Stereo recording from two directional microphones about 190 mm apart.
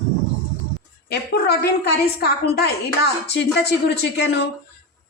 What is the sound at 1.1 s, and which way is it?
Speech, 55° left (ahead or behind).